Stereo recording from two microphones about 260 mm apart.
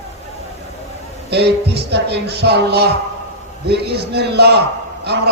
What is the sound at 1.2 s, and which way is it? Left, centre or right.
A man's voice, right.